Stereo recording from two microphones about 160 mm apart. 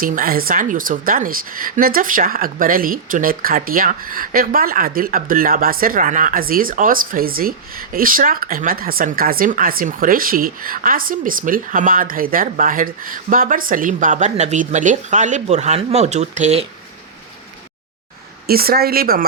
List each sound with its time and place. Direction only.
0.0 s a woman's voice: 60° right (ahead or behind); by 16.6 s 45° right (ahead or behind)
18.4 s speech: 70° right (ahead or behind)